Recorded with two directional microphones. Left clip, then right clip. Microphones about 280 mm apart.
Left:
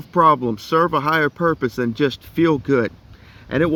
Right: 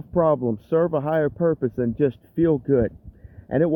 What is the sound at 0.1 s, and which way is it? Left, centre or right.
Speech, centre.